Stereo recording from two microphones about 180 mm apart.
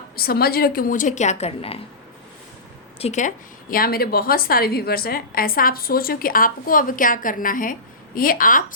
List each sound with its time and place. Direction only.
0.2 s a woman's voice: 55° left (ahead or behind); by 1.8 s 35° left (ahead or behind)
3.0 s a woman's voice: 40° left (ahead or behind)